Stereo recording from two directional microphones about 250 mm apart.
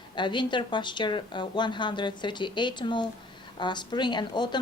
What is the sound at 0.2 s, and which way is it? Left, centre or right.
A woman's voice, centre.